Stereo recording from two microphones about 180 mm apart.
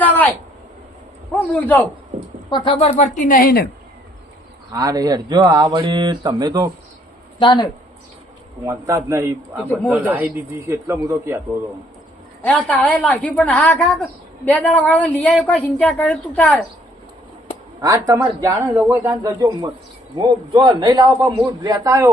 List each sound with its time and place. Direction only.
0.0 s a sound: 10° left (ahead or behind)
1.5 s a woman's voice: 10° left (ahead or behind)
2.5 s speech: 25° left (ahead or behind)
3.0 s speech: 45° left (ahead or behind)
4.7 s speech: 20° right (ahead or behind)
7.3 s speech: 25° left (ahead or behind)
8.6 s a man's voice: 15° right (ahead or behind)
12.4 s a woman's voice: 10° left (ahead or behind)
17.7 s a man's voice: 20° right (ahead or behind)